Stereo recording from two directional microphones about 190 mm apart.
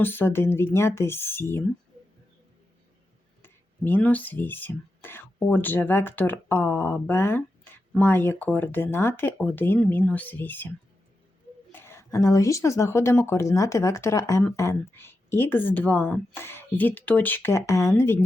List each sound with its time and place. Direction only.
0.0 s speech: 10° left (ahead or behind)
3.4 s speech: 10° left (ahead or behind)
11.7 s speech: 10° left (ahead or behind)